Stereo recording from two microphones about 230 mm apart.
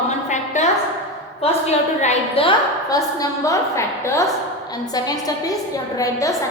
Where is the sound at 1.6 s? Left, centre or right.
Left.